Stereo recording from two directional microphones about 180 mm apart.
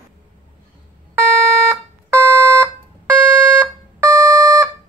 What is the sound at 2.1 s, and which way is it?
Smoke detector, 15° right (ahead or behind).